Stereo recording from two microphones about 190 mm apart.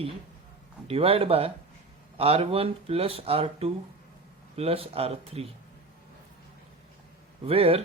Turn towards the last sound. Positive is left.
turn(degrees=-30)  # may be behind; listen again after turning